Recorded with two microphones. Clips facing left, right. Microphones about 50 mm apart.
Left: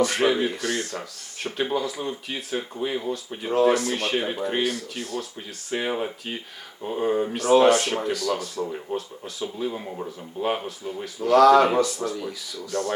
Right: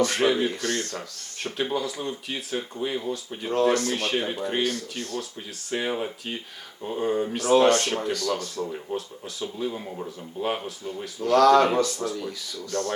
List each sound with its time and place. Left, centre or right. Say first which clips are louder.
0.0 s speech: left 1 dB; centre